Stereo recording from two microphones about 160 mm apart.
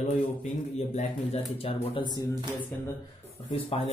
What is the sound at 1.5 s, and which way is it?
Speech, 35° left (ahead or behind).